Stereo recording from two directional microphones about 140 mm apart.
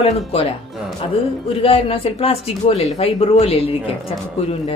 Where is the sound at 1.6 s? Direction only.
40° left (ahead or behind).